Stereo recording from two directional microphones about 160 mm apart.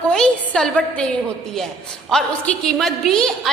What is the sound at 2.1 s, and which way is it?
A woman's voice, 5° left (ahead or behind).